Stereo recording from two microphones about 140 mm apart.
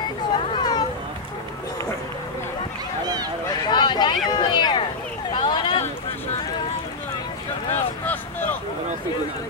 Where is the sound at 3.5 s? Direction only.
30° left (ahead or behind).